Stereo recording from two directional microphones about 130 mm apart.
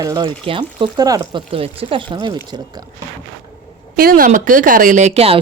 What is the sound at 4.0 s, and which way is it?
A woman's voice, 90° right.